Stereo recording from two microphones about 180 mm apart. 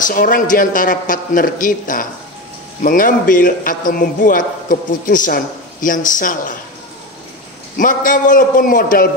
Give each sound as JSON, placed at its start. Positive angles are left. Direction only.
{"t": 0.0, "sound": "a man's voice", "side_deg": 50}
{"t": 7.7, "sound": "a man's voice", "side_deg": 50}